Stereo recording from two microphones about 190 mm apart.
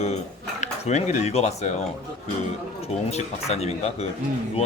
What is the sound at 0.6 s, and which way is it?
Speech, 35° left (ahead or behind).